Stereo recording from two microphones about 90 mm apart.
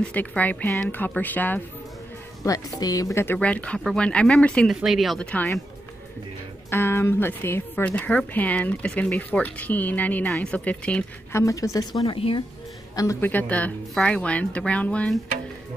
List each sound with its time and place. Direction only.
0.0 s speech: 15° left (ahead or behind)
0.9 s speech: 20° left (ahead or behind)
2.8 s speech: 40° left (ahead or behind)
3.3 s speech: 15° left (ahead or behind)
4.7 s speech: 5° right (ahead or behind)
5.2 s speech: 15° left (ahead or behind)
6.7 s speech: 25° left (ahead or behind)
11.3 s a woman's voice: 35° left (ahead or behind)
12.2 s speech: 90° left
12.9 s a woman's voice: 35° left (ahead or behind)
13.2 s speech: 20° left (ahead or behind)